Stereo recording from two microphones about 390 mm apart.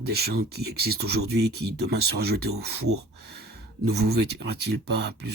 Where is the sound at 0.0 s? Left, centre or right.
Right.